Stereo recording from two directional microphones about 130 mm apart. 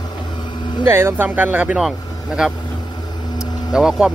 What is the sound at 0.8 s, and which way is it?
Speech, 20° right (ahead or behind).